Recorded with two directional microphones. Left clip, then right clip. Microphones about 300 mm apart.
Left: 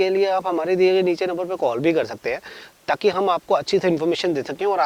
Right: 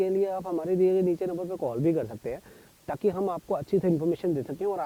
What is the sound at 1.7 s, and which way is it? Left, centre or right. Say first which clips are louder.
A man's voice: left 7 dB; centre.